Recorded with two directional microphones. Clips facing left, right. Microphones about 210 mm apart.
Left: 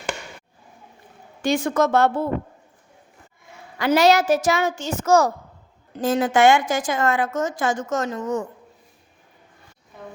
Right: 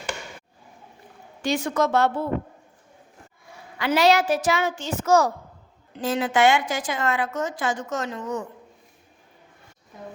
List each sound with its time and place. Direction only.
1.4 s a woman's voice: 50° left (ahead or behind)
3.8 s a woman's voice: 45° left (ahead or behind)